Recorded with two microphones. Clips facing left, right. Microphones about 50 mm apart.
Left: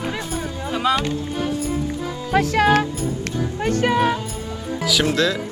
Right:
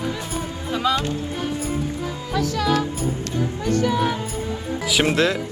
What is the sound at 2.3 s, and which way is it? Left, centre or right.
Speech, left.